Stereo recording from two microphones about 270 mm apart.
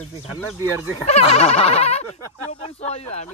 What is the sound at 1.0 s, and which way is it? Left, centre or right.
Speech, left.